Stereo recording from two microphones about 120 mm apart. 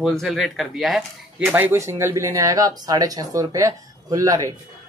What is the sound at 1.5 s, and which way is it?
Speech, 20° right (ahead or behind).